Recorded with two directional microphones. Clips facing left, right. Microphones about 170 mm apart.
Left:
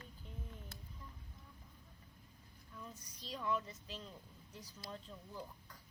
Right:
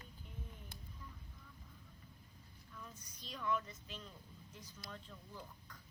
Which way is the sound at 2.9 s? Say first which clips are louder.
Left 4 dB; 35° left (ahead or behind).